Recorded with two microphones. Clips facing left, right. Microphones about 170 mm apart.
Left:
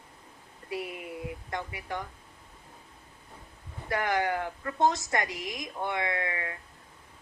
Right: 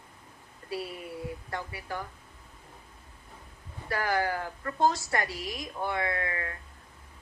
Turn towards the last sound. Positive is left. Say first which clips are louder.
# even
turn(degrees=20)  # may be behind; listen again after turning